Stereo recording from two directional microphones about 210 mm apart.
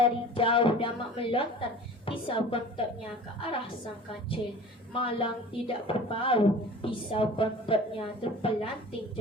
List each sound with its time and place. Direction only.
0.0 s a woman's voice: 25° left (ahead or behind)
4.9 s a woman's voice: 25° left (ahead or behind)